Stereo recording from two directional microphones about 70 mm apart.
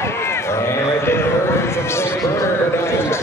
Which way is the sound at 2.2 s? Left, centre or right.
Left.